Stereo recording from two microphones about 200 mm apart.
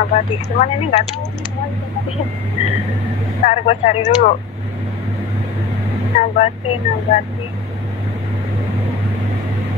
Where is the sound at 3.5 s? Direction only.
35° left (ahead or behind).